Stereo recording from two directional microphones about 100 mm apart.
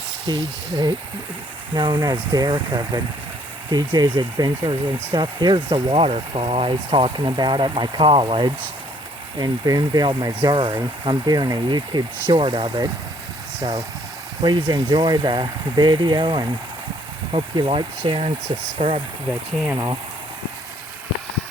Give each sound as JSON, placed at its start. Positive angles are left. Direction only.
{"t": 0.3, "sound": "speech", "side_deg": -40}
{"t": 2.0, "sound": "speech", "side_deg": -40}
{"t": 4.6, "sound": "speech", "side_deg": -55}
{"t": 9.4, "sound": "speech", "side_deg": -40}
{"t": 12.3, "sound": "speech", "side_deg": -60}
{"t": 17.3, "sound": "speech", "side_deg": -65}
{"t": 18.8, "sound": "speech", "side_deg": -75}
{"t": 19.7, "sound": "speech", "side_deg": -45}